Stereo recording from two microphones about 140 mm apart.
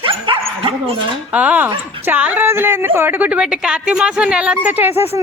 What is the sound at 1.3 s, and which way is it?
A woman's voice, 10° right (ahead or behind).